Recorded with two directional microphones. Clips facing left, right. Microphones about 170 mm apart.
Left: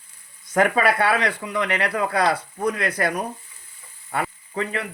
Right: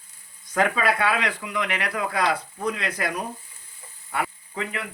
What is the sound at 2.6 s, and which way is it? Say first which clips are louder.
Speech: left 4 dB; 50° left (ahead or behind).